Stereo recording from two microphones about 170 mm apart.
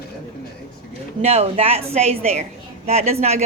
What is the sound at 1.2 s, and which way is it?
A woman's voice, 35° right (ahead or behind).